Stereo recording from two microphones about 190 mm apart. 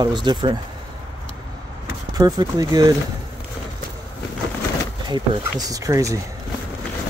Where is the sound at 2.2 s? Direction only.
20° right (ahead or behind).